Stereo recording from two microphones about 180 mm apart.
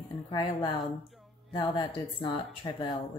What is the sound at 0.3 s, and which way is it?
A woman's voice, 25° left (ahead or behind).